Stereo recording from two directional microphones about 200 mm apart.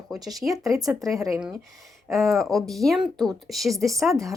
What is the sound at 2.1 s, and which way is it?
Speech, centre (ahead or behind).